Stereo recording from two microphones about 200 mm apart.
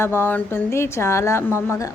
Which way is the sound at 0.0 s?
10° left (ahead or behind).